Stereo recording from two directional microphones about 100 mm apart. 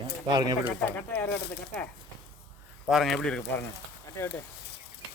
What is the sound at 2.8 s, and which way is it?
Speech, centre (ahead or behind).